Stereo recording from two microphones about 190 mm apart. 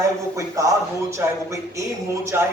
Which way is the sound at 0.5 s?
15° right (ahead or behind).